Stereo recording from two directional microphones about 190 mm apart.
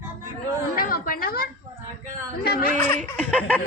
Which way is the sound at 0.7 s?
50° left (ahead or behind).